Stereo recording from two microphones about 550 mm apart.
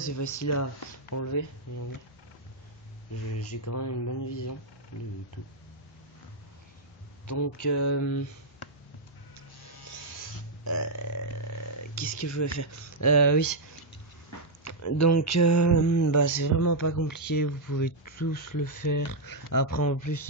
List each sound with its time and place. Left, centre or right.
0.0 s speech: left
3.3 s speech: left
7.2 s speech: left
10.6 s speech: left
14.6 s speech: left